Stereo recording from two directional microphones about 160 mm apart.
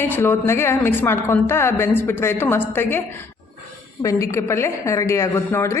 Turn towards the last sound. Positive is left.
turn(degrees=15)  # may be behind; listen again after turning